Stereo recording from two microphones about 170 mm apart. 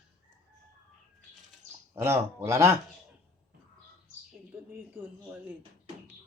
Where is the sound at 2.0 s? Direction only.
15° right (ahead or behind).